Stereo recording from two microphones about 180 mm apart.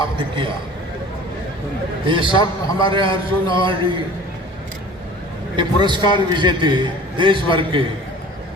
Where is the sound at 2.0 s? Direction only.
25° right (ahead or behind).